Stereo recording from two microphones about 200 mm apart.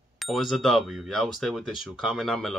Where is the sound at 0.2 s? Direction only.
Centre (ahead or behind).